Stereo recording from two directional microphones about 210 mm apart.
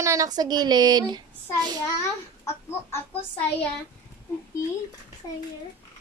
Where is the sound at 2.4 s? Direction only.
10° left (ahead or behind).